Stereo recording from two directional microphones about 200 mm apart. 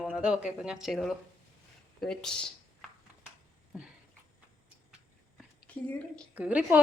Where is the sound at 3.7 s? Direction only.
5° right (ahead or behind).